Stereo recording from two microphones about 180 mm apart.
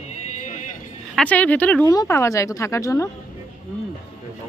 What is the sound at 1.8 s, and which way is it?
Speech, 20° left (ahead or behind).